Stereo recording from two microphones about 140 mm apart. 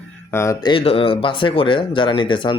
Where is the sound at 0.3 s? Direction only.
20° left (ahead or behind).